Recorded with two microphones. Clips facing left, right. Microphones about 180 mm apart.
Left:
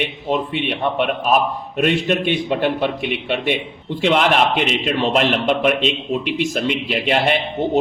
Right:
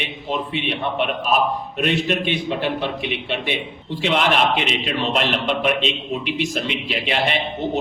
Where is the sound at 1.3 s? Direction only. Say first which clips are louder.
Left 2 dB; 50° left (ahead or behind).